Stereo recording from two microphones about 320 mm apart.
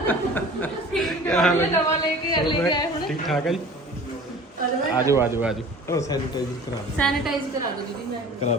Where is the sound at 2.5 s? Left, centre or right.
Centre.